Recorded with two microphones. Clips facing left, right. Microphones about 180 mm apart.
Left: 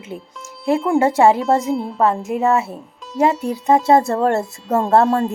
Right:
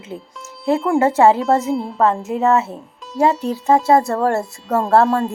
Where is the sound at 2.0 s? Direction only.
15° left (ahead or behind).